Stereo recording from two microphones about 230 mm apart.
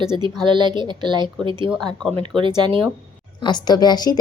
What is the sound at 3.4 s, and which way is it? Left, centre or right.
Speech, centre.